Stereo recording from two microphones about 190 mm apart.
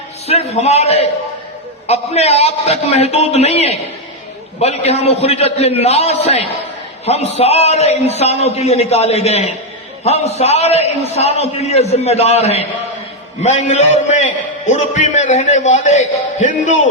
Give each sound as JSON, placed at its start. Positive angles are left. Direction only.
{"t": 0.3, "sound": "a man's voice", "side_deg": 35}